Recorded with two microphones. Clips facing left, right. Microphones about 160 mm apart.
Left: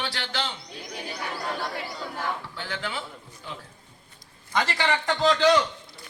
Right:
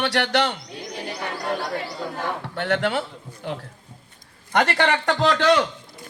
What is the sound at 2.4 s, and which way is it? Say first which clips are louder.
A man's voice: right 11 dB; 65° right (ahead or behind).